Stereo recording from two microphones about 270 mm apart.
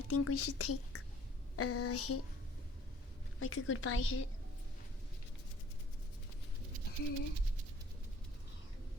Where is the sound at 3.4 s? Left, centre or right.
Left.